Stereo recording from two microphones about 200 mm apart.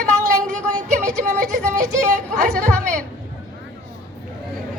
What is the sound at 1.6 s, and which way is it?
Speech, 40° right (ahead or behind).